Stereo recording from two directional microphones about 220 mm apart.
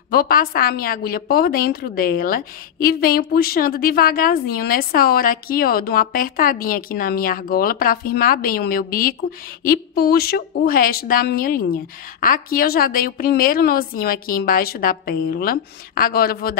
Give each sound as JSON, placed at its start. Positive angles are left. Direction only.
{"t": 0.1, "sound": "a woman's voice", "side_deg": 45}